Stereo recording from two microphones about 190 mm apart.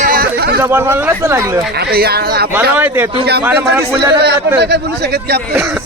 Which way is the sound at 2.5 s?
10° right (ahead or behind).